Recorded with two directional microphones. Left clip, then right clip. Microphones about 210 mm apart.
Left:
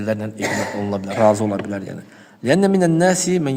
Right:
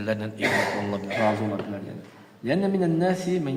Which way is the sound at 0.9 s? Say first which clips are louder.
Left 8 dB; 50° left (ahead or behind).